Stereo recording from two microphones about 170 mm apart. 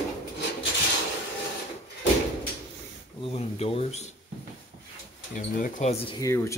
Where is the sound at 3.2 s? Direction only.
35° left (ahead or behind).